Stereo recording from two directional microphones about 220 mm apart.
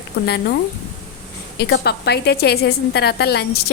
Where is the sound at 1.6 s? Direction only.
50° left (ahead or behind).